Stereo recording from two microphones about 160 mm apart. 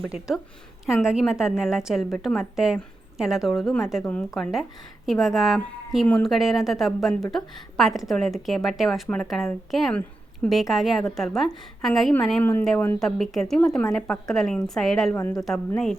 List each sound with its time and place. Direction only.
0.0 s a woman's voice: 5° right (ahead or behind)
12.4 s a woman's voice: 10° left (ahead or behind)
15.1 s speech: 20° left (ahead or behind)